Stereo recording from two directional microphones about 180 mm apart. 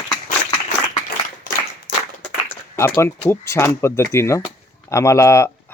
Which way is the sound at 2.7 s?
15° left (ahead or behind).